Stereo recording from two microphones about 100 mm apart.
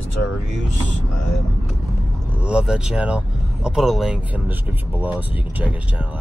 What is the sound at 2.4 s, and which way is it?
Speech, 10° right (ahead or behind).